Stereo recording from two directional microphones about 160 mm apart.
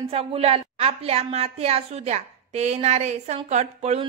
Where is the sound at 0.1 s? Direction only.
40° right (ahead or behind).